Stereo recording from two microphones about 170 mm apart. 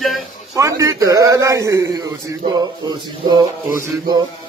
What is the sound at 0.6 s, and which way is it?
A man's voice, 20° right (ahead or behind).